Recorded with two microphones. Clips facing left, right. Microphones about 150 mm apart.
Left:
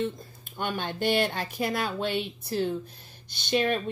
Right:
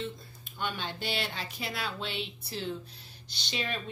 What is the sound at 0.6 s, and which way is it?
Speech, 50° left (ahead or behind).